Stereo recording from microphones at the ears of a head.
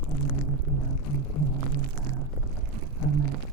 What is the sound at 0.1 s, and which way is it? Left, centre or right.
Music, right.